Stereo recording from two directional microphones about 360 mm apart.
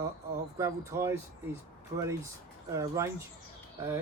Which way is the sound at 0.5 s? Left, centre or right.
Centre.